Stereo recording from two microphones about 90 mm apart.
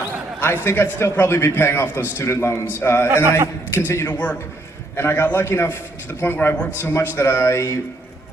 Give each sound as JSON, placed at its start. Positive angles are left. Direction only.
{"t": 0.6, "sound": "a man's voice", "side_deg": 30}
{"t": 3.2, "sound": "a man's voice", "side_deg": -20}
{"t": 3.8, "sound": "a man's voice", "side_deg": 25}